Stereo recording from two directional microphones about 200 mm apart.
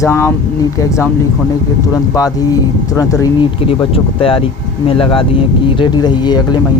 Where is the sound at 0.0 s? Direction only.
10° left (ahead or behind).